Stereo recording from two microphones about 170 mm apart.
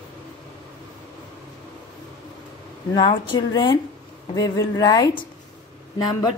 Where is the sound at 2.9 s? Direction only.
30° left (ahead or behind).